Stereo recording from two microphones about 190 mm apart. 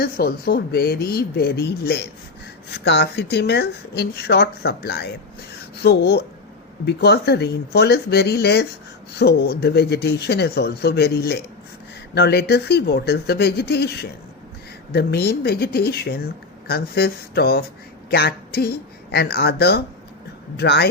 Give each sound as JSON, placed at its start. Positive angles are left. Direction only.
{"t": 0.0, "sound": "speech", "side_deg": 55}